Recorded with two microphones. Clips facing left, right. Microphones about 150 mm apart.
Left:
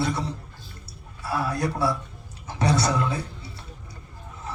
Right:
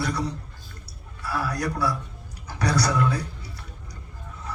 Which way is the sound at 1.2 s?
25° left (ahead or behind).